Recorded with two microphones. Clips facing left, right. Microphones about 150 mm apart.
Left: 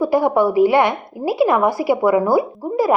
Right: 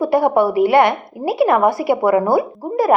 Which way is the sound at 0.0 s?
65° right (ahead or behind).